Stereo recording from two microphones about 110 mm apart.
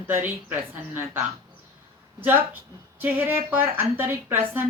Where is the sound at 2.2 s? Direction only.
20° right (ahead or behind).